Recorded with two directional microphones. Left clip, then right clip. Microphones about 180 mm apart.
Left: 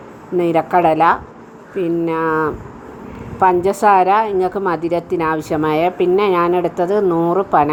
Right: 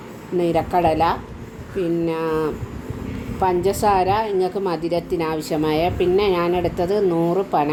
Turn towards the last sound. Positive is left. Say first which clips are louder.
# left 5 dB
turn(degrees=20)  # may be behind; listen again after turning